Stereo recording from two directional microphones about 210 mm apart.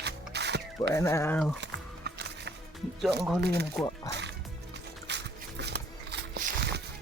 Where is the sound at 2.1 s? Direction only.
55° right (ahead or behind).